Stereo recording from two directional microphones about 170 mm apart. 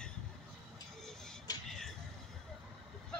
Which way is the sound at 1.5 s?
25° left (ahead or behind).